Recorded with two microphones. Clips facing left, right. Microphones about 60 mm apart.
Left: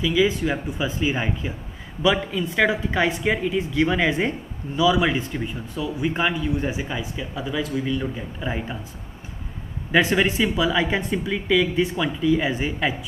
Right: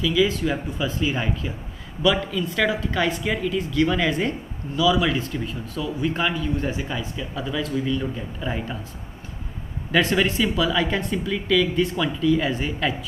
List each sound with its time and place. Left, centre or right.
0.0 s speech: centre
9.9 s speech: centre